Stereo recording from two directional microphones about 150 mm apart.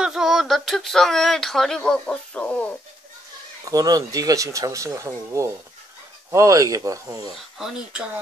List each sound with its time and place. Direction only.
0.0 s speech: 5° right (ahead or behind)
3.6 s speech: 25° right (ahead or behind)
7.5 s speech: 5° right (ahead or behind)